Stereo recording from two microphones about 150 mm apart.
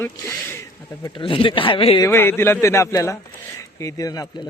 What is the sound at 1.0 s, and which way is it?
Speech, 35° left (ahead or behind).